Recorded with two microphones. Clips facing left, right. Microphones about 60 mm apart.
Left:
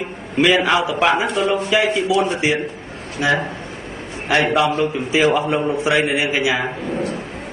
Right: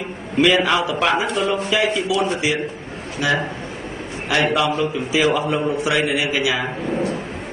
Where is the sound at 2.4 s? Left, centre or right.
Left.